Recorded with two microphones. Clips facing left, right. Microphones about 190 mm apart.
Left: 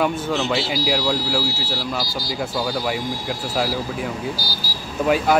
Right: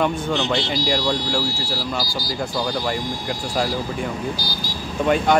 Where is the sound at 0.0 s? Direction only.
5° left (ahead or behind).